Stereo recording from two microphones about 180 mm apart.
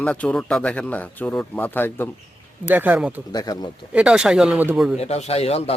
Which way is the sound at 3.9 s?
5° right (ahead or behind).